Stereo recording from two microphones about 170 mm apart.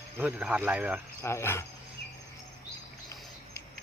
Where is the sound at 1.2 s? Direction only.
15° left (ahead or behind).